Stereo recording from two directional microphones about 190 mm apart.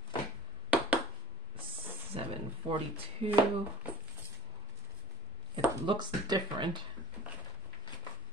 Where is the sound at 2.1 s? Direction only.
30° right (ahead or behind).